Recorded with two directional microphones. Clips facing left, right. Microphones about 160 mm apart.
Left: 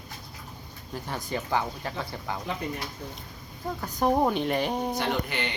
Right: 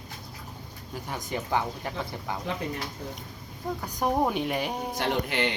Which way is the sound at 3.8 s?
10° right (ahead or behind).